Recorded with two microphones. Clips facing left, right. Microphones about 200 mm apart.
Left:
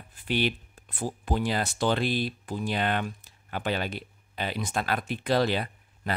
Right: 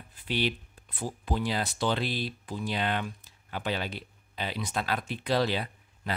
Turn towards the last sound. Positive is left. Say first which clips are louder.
# left 2 dB
turn(degrees=55)  # may be behind; listen again after turning